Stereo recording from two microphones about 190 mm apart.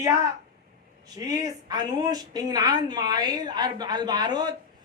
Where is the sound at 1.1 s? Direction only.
20° right (ahead or behind).